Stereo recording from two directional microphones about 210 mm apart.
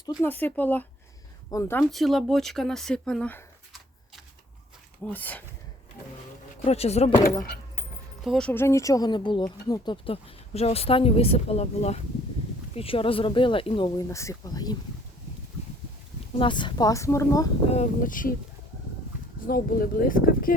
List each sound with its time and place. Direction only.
0.0 s speech: 15° left (ahead or behind)
1.8 s speech: centre (ahead or behind)
6.7 s speech: 30° left (ahead or behind)
7.4 s keys jangling: 50° left (ahead or behind)
8.2 s speech: centre (ahead or behind); by 14.8 s 20° left (ahead or behind)
16.4 s speech: 20° left (ahead or behind)
17.7 s speech: 35° left (ahead or behind)
19.5 s speech: 45° left (ahead or behind)